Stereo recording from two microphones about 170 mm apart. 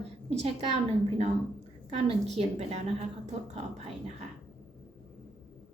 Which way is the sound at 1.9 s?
40° right (ahead or behind).